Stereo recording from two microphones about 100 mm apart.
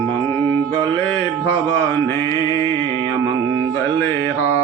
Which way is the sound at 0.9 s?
25° left (ahead or behind).